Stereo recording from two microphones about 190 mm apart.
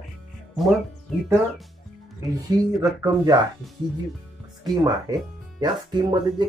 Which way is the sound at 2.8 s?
20° right (ahead or behind).